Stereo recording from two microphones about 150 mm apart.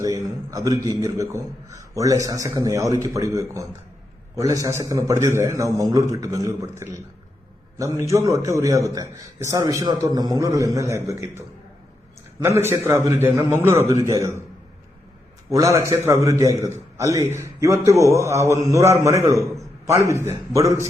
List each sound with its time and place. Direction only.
0.0 s a sound: 20° right (ahead or behind)
0.8 s a man's voice: 25° right (ahead or behind)
15.4 s a man's voice: 20° right (ahead or behind)